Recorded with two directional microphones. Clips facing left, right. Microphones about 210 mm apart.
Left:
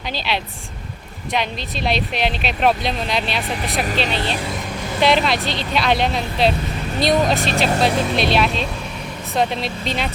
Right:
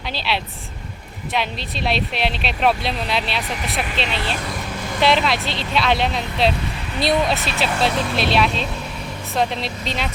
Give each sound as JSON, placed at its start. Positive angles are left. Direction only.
{"t": 0.3, "sound": "speech", "side_deg": 0}
{"t": 3.8, "sound": "speech", "side_deg": 40}
{"t": 4.9, "sound": "speech", "side_deg": 0}
{"t": 7.1, "sound": "speech", "side_deg": 45}
{"t": 8.1, "sound": "speech", "side_deg": 0}